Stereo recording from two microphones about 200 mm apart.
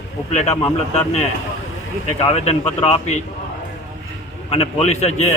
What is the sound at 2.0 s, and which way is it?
A man's voice, 30° left (ahead or behind).